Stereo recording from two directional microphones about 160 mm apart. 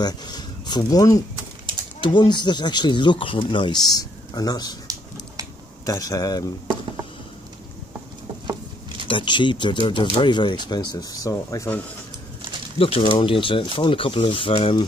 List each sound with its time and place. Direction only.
0.0 s speech: 25° left (ahead or behind)
5.9 s speech: 20° left (ahead or behind)
9.0 s speech: 30° left (ahead or behind)
12.7 s speech: 35° left (ahead or behind)